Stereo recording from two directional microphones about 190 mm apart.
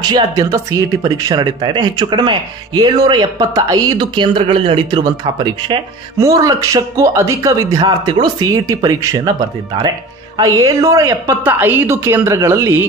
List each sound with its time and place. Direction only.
0.0 s speech: 20° right (ahead or behind)